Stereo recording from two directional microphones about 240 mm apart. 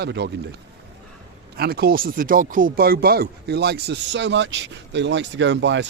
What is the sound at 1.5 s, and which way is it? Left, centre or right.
Speech, right.